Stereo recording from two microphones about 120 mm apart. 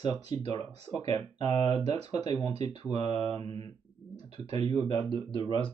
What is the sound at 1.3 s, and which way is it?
Speech, 30° left (ahead or behind).